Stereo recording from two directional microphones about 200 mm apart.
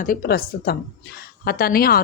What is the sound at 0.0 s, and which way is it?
A woman's voice, 45° left (ahead or behind).